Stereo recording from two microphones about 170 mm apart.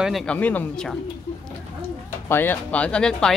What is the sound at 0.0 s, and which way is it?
Speech, 5° left (ahead or behind).